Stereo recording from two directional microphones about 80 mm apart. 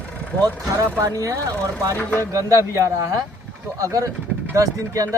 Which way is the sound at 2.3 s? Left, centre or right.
Right.